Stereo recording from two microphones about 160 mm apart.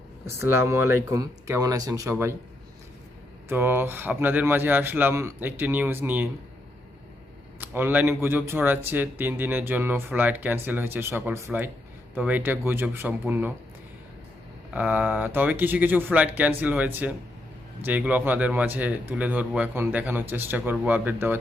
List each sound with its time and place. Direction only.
0.3 s speech: 15° right (ahead or behind)
3.5 s speech: 15° right (ahead or behind)
7.6 s speech: 10° right (ahead or behind)
14.7 s speech: 10° right (ahead or behind)